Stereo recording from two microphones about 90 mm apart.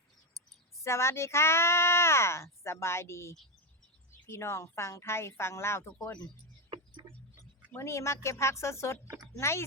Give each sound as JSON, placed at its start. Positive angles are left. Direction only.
{"t": 0.9, "sound": "speech", "side_deg": 30}
{"t": 6.0, "sound": "speech", "side_deg": 45}
{"t": 7.0, "sound": "a sound", "side_deg": -50}
{"t": 7.8, "sound": "a woman's voice", "side_deg": 30}